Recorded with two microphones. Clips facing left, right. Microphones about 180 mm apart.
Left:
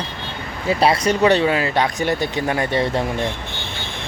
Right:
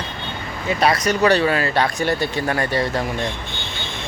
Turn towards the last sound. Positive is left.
turn(degrees=25)  # may be behind; listen again after turning